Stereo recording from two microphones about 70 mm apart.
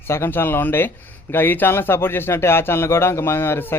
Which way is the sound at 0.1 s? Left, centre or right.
Left.